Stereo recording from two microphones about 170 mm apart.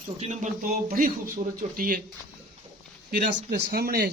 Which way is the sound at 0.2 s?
45° right (ahead or behind).